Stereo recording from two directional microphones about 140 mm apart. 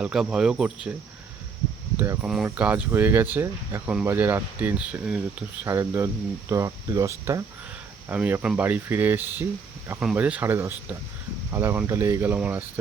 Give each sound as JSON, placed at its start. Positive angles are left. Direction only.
{"t": 0.0, "sound": "speech", "side_deg": -5}
{"t": 2.2, "sound": "speech", "side_deg": -5}
{"t": 5.6, "sound": "speech", "side_deg": -20}
{"t": 8.1, "sound": "speech", "side_deg": -10}